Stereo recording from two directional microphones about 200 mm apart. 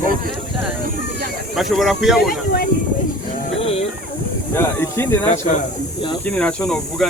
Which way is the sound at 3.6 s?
30° left (ahead or behind).